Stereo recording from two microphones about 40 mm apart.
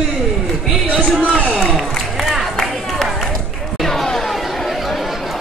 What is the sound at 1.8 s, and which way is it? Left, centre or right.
Music, centre.